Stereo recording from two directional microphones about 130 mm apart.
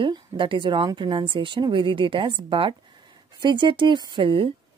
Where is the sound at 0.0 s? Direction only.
40° right (ahead or behind).